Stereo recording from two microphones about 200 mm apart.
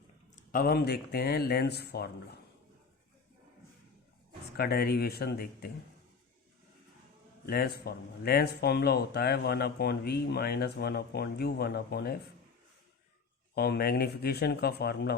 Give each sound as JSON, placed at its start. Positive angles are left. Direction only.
{"t": 0.3, "sound": "speech", "side_deg": 45}
{"t": 4.5, "sound": "speech", "side_deg": 50}
{"t": 7.4, "sound": "speech", "side_deg": 50}
{"t": 13.5, "sound": "speech", "side_deg": 55}